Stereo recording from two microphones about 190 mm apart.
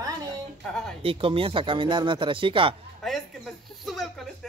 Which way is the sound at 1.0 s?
30° right (ahead or behind).